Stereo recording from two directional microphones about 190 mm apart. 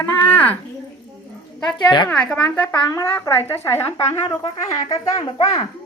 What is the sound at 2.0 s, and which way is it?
A woman's voice, 5° left (ahead or behind).